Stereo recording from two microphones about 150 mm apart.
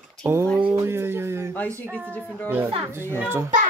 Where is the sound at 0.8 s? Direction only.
15° right (ahead or behind).